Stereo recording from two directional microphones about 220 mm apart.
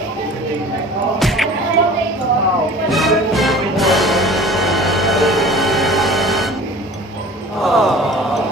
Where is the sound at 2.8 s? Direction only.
Centre (ahead or behind).